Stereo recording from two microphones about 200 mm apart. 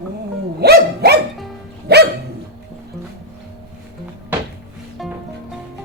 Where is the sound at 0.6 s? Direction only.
50° right (ahead or behind).